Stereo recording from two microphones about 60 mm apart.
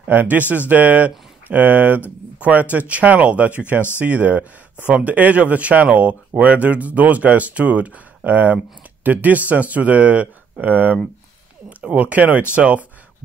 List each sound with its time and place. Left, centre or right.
0.0 s speech: right